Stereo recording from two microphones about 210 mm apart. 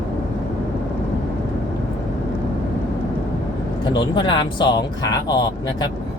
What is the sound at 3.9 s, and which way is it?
Speech, 20° left (ahead or behind).